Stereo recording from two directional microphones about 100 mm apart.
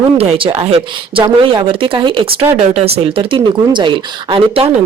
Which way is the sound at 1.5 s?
55° right (ahead or behind).